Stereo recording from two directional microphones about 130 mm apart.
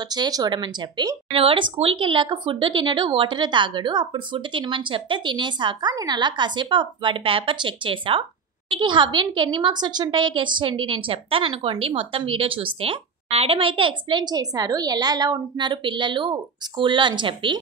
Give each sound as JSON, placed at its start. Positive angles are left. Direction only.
{"t": 0.1, "sound": "speech", "side_deg": -30}